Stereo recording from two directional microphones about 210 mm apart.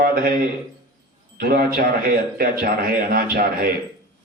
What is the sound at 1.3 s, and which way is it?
A man's voice, 45° right (ahead or behind).